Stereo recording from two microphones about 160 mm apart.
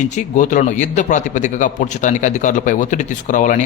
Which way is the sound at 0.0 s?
50° left (ahead or behind).